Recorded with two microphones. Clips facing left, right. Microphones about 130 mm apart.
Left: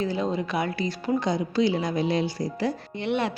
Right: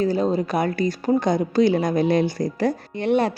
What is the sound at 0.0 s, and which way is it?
A woman's voice, 40° right (ahead or behind).